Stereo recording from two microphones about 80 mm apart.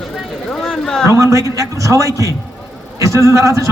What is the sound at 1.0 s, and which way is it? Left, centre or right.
A man's voice, right.